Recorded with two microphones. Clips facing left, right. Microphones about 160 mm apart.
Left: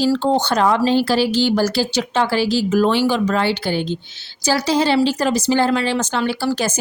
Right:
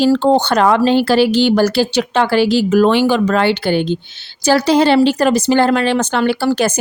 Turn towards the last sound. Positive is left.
turn(degrees=-60)  # may be behind; listen again after turning